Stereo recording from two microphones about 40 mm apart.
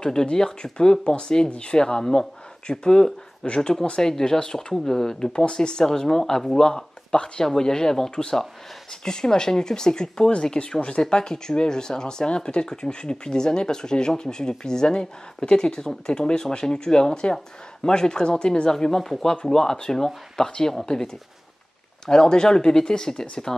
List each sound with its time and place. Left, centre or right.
0.0 s speech: centre